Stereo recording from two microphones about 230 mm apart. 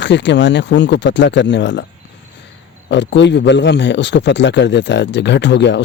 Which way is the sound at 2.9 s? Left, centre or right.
Left.